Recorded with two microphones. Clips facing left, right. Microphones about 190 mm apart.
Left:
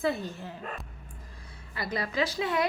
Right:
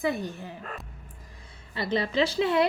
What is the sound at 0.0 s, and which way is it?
Speech, 15° right (ahead or behind).